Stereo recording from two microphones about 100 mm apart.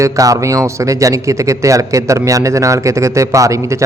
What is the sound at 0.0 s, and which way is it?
A man's voice, 35° right (ahead or behind).